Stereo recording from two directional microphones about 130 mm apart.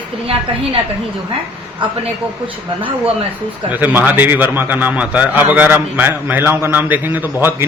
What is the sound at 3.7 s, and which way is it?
A man's voice, 15° right (ahead or behind).